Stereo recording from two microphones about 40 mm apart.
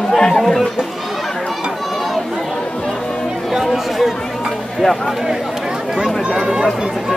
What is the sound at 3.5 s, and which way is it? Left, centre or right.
Chatter, centre.